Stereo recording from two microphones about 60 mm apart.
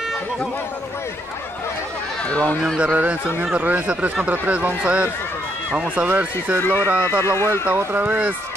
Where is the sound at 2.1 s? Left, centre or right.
Centre.